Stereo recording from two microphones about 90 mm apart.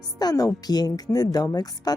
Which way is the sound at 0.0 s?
45° left (ahead or behind).